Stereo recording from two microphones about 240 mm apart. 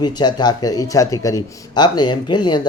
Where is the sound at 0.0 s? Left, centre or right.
Centre.